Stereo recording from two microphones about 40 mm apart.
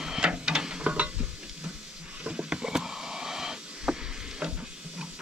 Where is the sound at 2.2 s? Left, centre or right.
Right.